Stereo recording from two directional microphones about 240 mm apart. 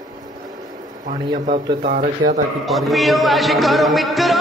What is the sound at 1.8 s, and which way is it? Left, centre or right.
Speech, right.